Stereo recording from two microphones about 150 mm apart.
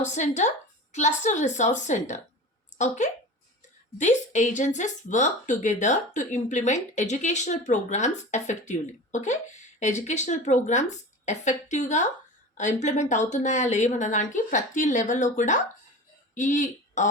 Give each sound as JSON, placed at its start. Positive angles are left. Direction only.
{"t": 0.0, "sound": "a woman's voice", "side_deg": 55}